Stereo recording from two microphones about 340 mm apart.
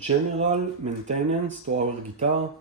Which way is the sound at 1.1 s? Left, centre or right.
Right.